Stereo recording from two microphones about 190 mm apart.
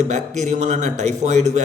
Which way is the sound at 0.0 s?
40° right (ahead or behind).